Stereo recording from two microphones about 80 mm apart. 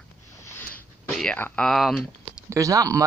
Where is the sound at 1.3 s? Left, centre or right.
Left.